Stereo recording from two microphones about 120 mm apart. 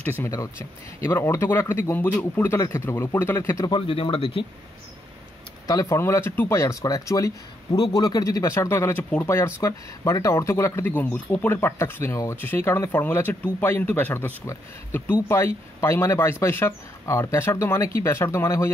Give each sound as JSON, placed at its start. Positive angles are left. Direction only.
{"t": 0.0, "sound": "speech", "side_deg": 15}
{"t": 3.7, "sound": "speech", "side_deg": 50}
{"t": 5.7, "sound": "speech", "side_deg": 30}